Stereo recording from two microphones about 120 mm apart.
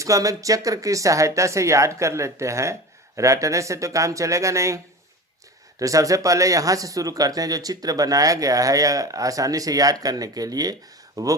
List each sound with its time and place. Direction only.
0.0 s speech: 30° right (ahead or behind)
5.8 s speech: 30° right (ahead or behind)